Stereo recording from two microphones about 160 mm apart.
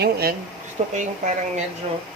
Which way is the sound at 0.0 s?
75° right (ahead or behind).